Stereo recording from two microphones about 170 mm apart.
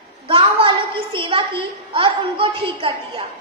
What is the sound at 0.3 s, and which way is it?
A woman's voice, 30° right (ahead or behind).